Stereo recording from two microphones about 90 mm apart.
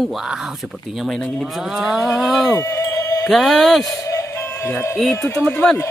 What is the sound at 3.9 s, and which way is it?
Music, 35° left (ahead or behind).